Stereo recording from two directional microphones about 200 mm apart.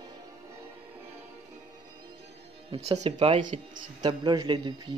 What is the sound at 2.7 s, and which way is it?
A man's voice, 30° right (ahead or behind).